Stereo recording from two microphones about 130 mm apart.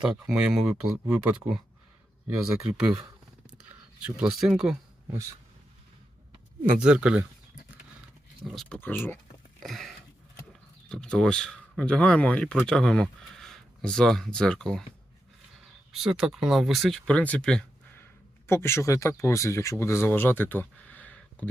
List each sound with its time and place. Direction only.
0.0 s speech: 5° right (ahead or behind)
4.0 s speech: 5° right (ahead or behind)
6.7 s speech: 10° right (ahead or behind)
8.4 s speech: centre (ahead or behind)
15.9 s speech: centre (ahead or behind)
18.4 s speech: 20° left (ahead or behind)